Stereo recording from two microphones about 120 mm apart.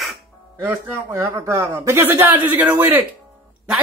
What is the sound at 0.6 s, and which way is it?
A man's voice, 25° right (ahead or behind).